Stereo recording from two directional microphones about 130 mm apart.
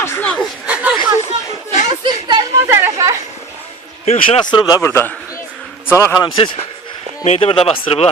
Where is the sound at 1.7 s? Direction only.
65° left (ahead or behind).